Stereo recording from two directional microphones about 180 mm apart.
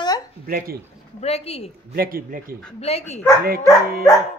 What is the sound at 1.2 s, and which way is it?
Speech, 35° left (ahead or behind).